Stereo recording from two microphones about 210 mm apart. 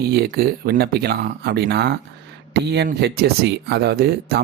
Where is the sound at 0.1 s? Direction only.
50° right (ahead or behind).